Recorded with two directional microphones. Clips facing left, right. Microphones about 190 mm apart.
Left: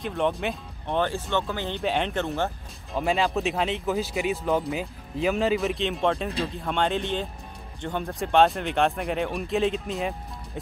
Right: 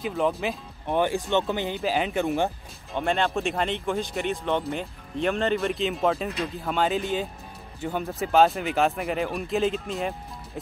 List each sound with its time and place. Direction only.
0.0 s speech: centre (ahead or behind)
0.8 s speech: 10° right (ahead or behind)
1.7 s speech: centre (ahead or behind)
2.9 s speech: centre (ahead or behind)